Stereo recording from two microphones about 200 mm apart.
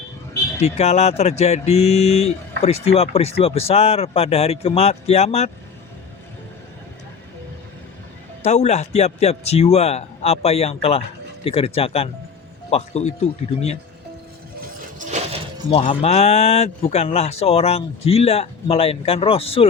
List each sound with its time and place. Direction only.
0.6 s speech: 35° left (ahead or behind)
8.4 s speech: 35° left (ahead or behind)
14.8 s a sound: 35° right (ahead or behind)
15.7 s speech: 35° left (ahead or behind)